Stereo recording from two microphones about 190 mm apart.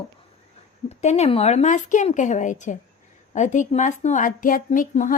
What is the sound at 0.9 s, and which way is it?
Speech, 35° left (ahead or behind).